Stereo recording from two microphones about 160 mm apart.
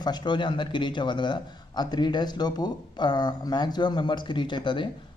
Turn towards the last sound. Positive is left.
turn(degrees=30)  # may be behind; listen again after turning